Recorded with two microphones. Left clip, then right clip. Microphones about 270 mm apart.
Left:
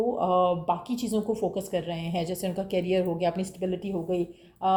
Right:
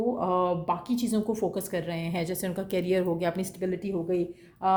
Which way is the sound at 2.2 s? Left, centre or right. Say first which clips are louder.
Left 1 dB; right.